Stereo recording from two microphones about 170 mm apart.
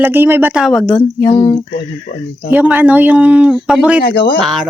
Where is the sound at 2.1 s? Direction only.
70° left (ahead or behind).